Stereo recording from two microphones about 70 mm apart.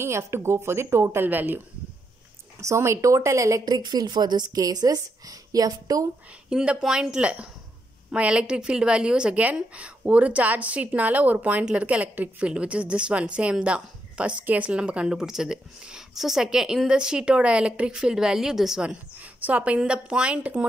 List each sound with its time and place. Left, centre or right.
0.0 s a woman's voice: right
2.6 s a woman's voice: right
3.6 s a woman's voice: right
6.5 s a woman's voice: centre
19.4 s a woman's voice: centre